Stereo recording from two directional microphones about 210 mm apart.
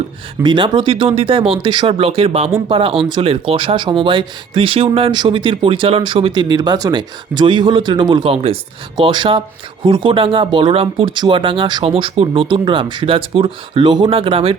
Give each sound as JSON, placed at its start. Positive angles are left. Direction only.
{"t": 0.4, "sound": "speech", "side_deg": -20}